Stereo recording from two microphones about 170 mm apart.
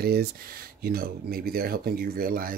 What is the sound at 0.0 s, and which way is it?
Speech, 65° right (ahead or behind).